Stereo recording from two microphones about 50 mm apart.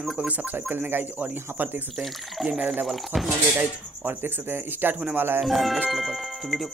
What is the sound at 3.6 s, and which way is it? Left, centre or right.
Speech, right.